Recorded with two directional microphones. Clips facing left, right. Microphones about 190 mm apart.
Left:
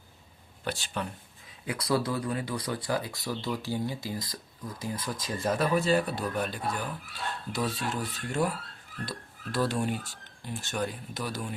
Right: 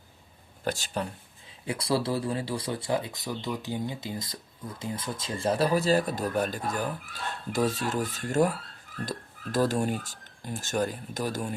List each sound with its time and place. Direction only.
0.6 s speech: 45° right (ahead or behind)
1.6 s speech: 30° right (ahead or behind); by 11.5 s 45° right (ahead or behind)